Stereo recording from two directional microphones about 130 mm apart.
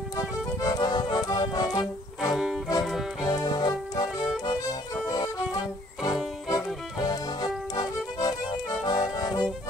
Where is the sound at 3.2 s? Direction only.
30° left (ahead or behind).